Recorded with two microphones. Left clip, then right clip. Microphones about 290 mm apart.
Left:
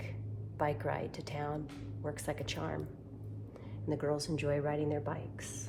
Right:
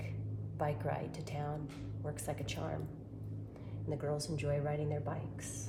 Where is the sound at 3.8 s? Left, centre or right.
Left.